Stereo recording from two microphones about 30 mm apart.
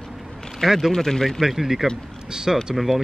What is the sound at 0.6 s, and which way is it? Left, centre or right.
Speech, centre.